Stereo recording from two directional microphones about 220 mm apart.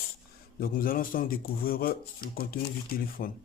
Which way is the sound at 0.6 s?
40° left (ahead or behind).